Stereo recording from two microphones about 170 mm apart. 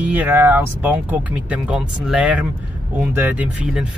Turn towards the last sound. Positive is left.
turn(degrees=-10)  # may be behind; listen again after turning